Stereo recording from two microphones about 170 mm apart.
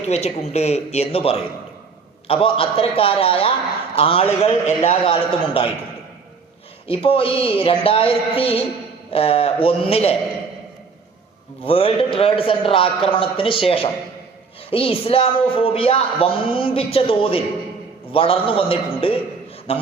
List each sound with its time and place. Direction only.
0.1 s a man's voice: 40° left (ahead or behind)
6.8 s a man's voice: 35° left (ahead or behind)
11.6 s a man's voice: 35° left (ahead or behind)
14.7 s a man's voice: 35° left (ahead or behind)